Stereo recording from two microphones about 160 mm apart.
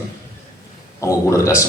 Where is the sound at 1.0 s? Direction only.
20° left (ahead or behind).